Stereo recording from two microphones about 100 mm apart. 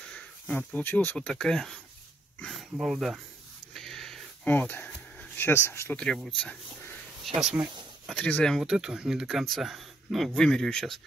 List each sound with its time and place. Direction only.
0.1 s speech: 10° left (ahead or behind)
1.1 s speech: 5° left (ahead or behind)
3.7 s a sound: 5° left (ahead or behind)
4.5 s speech: 20° left (ahead or behind)
5.9 s speech: 5° left (ahead or behind)
7.3 s speech: 5° right (ahead or behind)
8.2 s speech: 15° left (ahead or behind)
8.5 s speech: 5° right (ahead or behind)